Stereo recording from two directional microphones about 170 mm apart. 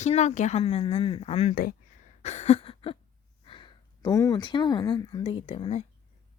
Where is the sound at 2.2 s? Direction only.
40° left (ahead or behind).